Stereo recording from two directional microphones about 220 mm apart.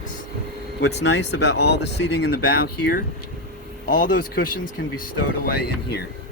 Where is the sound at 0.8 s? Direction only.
50° left (ahead or behind).